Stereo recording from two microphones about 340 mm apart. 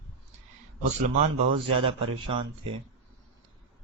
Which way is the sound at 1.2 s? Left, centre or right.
Centre.